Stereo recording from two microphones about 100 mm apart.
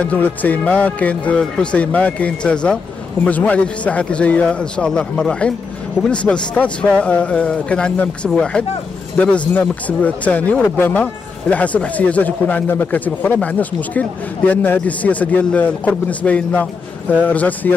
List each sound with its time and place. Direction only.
0.0 s speech: 15° left (ahead or behind)